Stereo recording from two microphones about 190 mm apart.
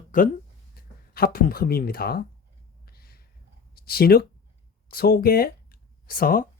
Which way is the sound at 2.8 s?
55° left (ahead or behind).